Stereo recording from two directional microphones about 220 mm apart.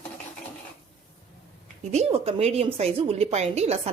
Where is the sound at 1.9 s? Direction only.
30° right (ahead or behind).